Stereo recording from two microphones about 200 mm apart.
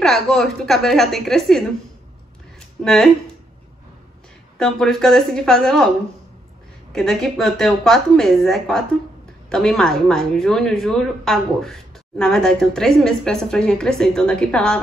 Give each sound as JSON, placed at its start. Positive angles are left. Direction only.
{"t": 0.0, "sound": "speech", "side_deg": 0}
{"t": 2.8, "sound": "speech", "side_deg": 0}
{"t": 4.6, "sound": "speech", "side_deg": 5}
{"t": 6.9, "sound": "speech", "side_deg": 0}